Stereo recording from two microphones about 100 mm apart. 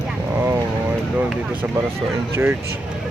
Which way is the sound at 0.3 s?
20° right (ahead or behind).